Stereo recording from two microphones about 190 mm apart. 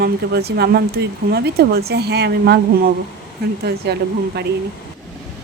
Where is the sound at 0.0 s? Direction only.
55° right (ahead or behind).